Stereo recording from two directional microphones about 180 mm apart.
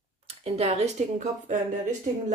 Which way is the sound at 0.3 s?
35° right (ahead or behind).